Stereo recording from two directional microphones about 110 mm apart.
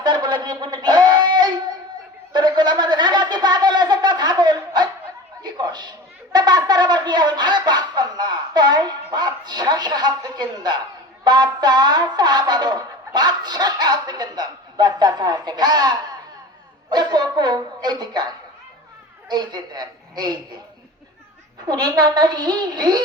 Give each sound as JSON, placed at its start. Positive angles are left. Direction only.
{"t": 0.0, "sound": "a sound", "side_deg": -40}
{"t": 11.2, "sound": "speech", "side_deg": -40}
{"t": 16.9, "sound": "bow-wow", "side_deg": -40}
{"t": 19.3, "sound": "a woman's voice", "side_deg": -40}
{"t": 21.7, "sound": "a woman's voice", "side_deg": -35}